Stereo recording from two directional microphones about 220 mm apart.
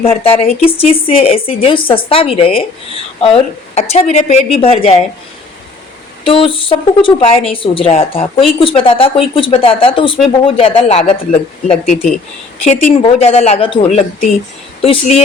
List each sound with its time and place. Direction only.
0.0 s a woman's voice: 25° left (ahead or behind)
6.2 s a woman's voice: 25° left (ahead or behind)